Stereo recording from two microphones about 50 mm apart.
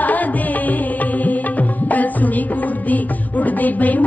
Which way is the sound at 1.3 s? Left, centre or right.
Left.